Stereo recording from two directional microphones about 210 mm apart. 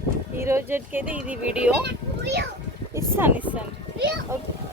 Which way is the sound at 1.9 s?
55° right (ahead or behind).